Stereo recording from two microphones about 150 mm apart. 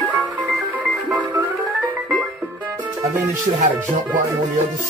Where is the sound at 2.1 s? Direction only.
10° left (ahead or behind).